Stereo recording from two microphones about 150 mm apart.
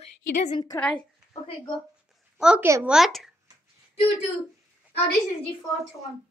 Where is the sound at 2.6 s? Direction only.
15° right (ahead or behind).